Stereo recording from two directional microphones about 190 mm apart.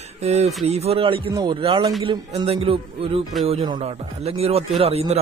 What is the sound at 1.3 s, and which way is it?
Speech, 25° right (ahead or behind).